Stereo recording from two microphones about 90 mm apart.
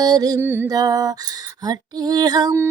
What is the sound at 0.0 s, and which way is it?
Music, 45° right (ahead or behind).